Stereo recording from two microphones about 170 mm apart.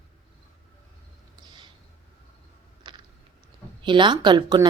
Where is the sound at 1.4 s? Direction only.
25° right (ahead or behind).